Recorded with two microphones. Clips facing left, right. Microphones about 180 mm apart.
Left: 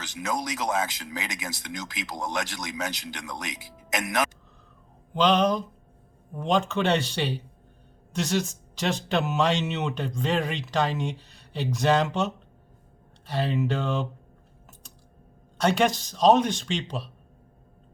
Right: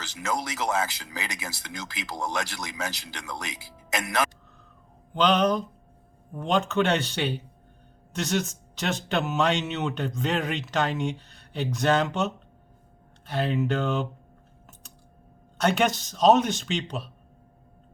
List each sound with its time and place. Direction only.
0.0 s speech: 20° left (ahead or behind)
5.1 s speech: centre (ahead or behind)
15.5 s speech: centre (ahead or behind)